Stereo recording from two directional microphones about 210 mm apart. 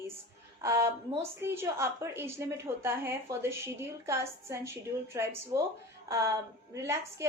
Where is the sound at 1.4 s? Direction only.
10° right (ahead or behind).